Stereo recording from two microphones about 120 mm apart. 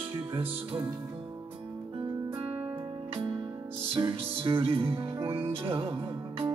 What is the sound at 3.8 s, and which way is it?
Music, 50° right (ahead or behind).